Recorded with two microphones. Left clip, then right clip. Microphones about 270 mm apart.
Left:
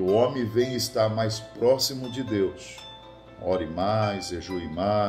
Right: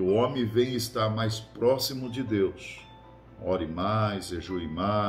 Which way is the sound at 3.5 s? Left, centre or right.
Centre.